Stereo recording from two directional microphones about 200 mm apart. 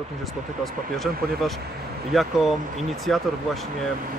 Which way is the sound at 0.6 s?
Centre (ahead or behind).